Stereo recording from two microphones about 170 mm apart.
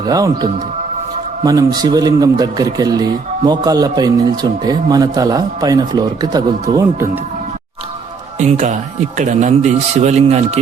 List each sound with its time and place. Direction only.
0.0 s speech: 20° right (ahead or behind)
8.4 s speech: 45° right (ahead or behind)